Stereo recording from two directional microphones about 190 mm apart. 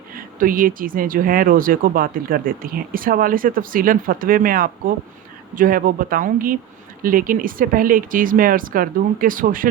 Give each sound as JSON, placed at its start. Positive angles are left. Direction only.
{"t": 0.1, "sound": "speech", "side_deg": -45}